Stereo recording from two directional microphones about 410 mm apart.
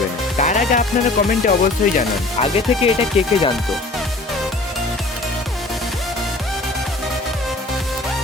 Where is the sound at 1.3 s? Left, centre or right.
Centre.